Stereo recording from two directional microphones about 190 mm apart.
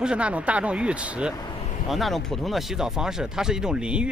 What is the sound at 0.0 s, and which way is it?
Speech, 5° right (ahead or behind).